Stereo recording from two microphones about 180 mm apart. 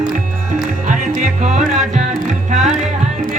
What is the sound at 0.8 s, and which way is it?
Music, 45° right (ahead or behind).